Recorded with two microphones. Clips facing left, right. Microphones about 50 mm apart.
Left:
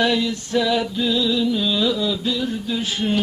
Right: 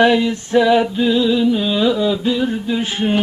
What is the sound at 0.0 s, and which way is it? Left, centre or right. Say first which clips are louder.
Mantra: right 6 dB; right.